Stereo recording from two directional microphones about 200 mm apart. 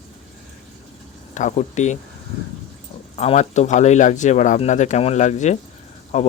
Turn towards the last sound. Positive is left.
turn(degrees=35)  # may be behind; listen again after turning